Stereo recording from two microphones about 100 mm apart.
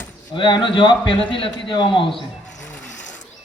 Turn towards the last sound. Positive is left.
turn(degrees=15)  # may be behind; listen again after turning